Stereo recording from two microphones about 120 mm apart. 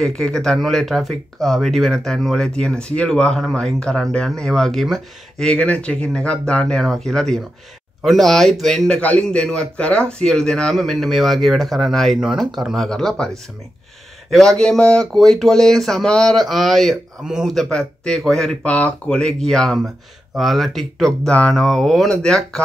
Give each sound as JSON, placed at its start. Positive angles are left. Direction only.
{"t": 0.0, "sound": "speech", "side_deg": 5}
{"t": 14.3, "sound": "speech", "side_deg": 5}